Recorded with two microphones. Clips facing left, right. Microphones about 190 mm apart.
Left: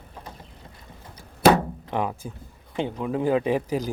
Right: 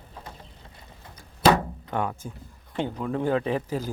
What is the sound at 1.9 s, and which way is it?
Speech, 20° left (ahead or behind).